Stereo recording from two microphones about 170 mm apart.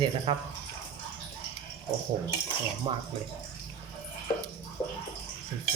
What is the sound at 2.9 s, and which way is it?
Speech, 30° right (ahead or behind).